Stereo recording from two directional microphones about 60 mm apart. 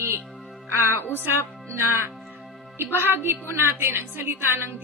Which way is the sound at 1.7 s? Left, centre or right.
Right.